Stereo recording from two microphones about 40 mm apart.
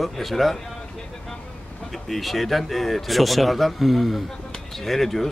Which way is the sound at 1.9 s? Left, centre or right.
Centre.